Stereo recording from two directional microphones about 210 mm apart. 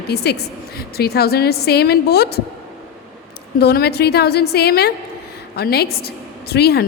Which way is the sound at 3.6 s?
50° left (ahead or behind).